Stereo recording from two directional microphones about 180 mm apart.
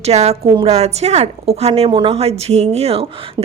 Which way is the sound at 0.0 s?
35° right (ahead or behind).